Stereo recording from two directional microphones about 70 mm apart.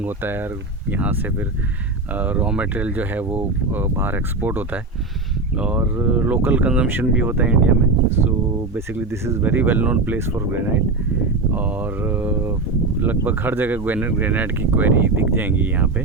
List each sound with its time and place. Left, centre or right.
0.0 s speech: right
9.0 s speech: right
9.4 s speech: right
10.2 s speech: right